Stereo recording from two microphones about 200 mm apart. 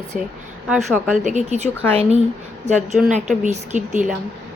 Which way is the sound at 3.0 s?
Centre (ahead or behind).